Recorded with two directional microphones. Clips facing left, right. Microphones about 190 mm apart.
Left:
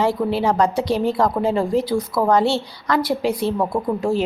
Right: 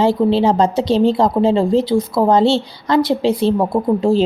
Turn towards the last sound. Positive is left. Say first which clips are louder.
# right 6 dB
turn(degrees=-30)  # may be behind; listen again after turning